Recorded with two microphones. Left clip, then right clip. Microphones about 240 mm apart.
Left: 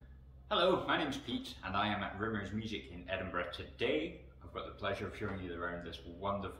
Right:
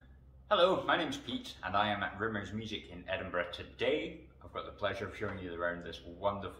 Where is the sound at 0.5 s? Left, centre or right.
Centre.